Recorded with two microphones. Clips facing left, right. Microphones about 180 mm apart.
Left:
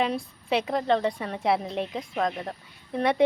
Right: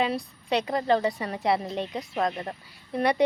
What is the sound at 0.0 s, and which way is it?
A woman's voice, centre (ahead or behind).